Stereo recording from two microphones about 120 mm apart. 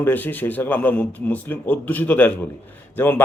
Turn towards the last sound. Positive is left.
turn(degrees=15)  # may be behind; listen again after turning